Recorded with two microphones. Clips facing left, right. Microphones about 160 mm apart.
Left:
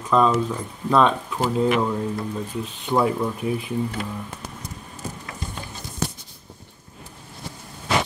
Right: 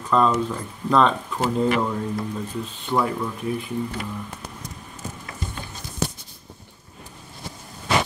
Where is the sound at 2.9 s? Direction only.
20° left (ahead or behind).